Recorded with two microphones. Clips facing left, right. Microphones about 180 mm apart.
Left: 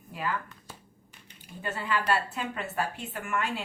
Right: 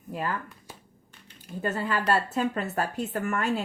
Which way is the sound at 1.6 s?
40° right (ahead or behind).